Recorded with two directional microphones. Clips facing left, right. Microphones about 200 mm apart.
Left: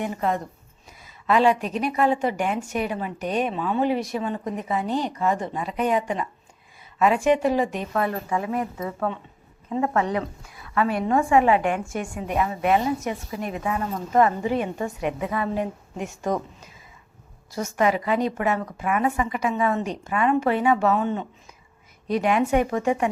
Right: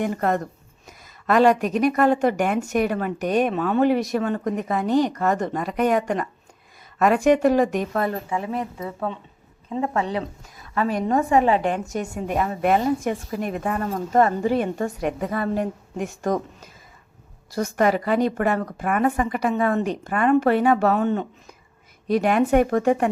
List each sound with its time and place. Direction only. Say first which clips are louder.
0.0 s speech: right 3 dB; 55° right (ahead or behind)
1.3 s speech: right 3 dB; 45° right (ahead or behind); by 4.4 s 65° right (ahead or behind)
4.4 s speech: right 3 dB; 45° right (ahead or behind)
8.3 s a woman's voice: left 1 dB; 25° right (ahead or behind); by 16.4 s 50° right (ahead or behind)
17.8 s speech: right 2 dB; 45° right (ahead or behind)
22.1 s speech: right 3 dB; 45° right (ahead or behind)